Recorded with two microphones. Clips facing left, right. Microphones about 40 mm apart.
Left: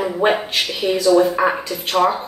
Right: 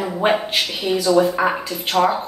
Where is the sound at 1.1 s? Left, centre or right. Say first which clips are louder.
Left 2 dB; right.